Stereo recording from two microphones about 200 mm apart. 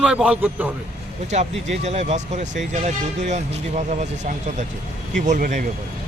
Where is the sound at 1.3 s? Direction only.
35° right (ahead or behind).